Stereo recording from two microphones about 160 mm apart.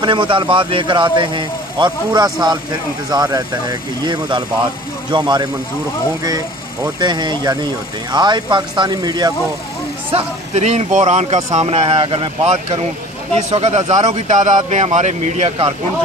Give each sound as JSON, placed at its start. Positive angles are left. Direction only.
{"t": 0.0, "sound": "speech", "side_deg": -30}
{"t": 6.8, "sound": "speech", "side_deg": -25}
{"t": 10.1, "sound": "a man's voice", "side_deg": -40}
{"t": 11.6, "sound": "a man's voice", "side_deg": -35}